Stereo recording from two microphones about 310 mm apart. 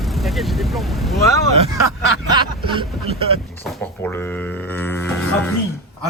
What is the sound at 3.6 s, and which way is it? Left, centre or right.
Speech, centre.